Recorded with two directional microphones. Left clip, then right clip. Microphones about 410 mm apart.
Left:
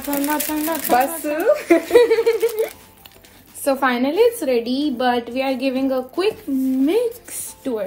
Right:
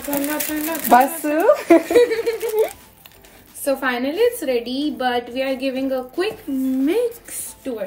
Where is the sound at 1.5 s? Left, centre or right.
Centre.